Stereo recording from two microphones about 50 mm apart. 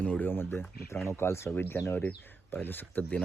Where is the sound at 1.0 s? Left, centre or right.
Left.